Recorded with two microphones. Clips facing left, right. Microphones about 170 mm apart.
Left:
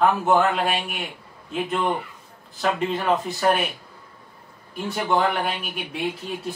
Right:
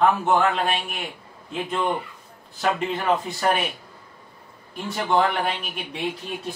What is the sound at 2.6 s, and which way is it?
Speech, centre (ahead or behind).